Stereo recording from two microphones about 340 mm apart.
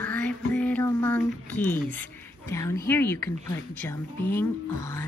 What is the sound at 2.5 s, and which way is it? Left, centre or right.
Speech, centre.